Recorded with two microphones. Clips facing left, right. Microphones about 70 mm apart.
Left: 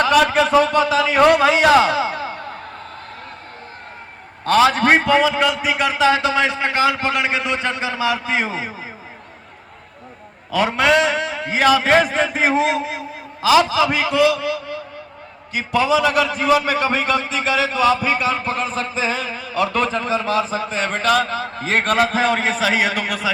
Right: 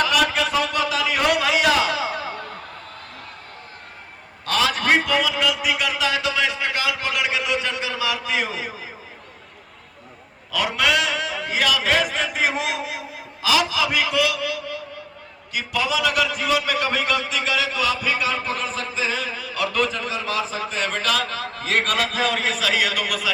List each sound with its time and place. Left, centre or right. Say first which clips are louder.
0.0 s a sound: left 6 dB; left
4.4 s a man's voice: left 7 dB; left
10.5 s a man's voice: left 5 dB; left